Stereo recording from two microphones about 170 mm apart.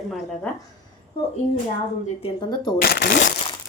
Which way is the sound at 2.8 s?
65° left (ahead or behind).